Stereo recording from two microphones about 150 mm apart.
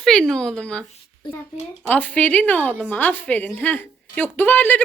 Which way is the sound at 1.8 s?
10° left (ahead or behind).